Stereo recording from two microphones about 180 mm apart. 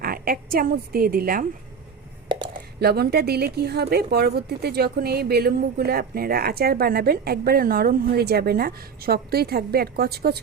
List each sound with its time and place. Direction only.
0.0 s a woman's voice: 55° right (ahead or behind)
2.5 s speech: 60° right (ahead or behind)